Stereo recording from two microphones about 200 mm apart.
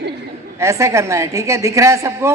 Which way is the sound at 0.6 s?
15° right (ahead or behind).